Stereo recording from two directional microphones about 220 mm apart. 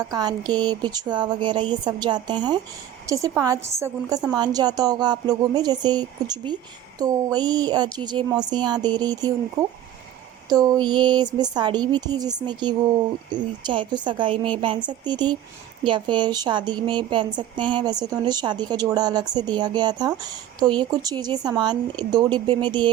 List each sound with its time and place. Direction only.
0.1 s a woman's voice: 20° right (ahead or behind)